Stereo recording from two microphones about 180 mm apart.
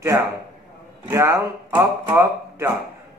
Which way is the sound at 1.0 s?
15° right (ahead or behind).